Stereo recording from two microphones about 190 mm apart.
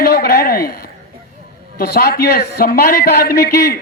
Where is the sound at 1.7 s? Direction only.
55° left (ahead or behind).